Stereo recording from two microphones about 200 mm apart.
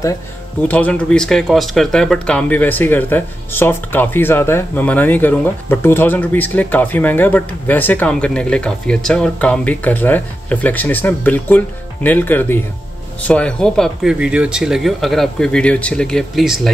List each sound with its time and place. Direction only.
0.6 s speech: 5° left (ahead or behind)